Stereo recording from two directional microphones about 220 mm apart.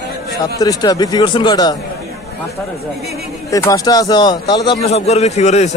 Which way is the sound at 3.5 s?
15° left (ahead or behind).